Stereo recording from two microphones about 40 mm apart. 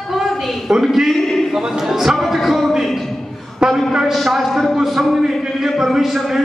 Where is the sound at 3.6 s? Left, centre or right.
Centre.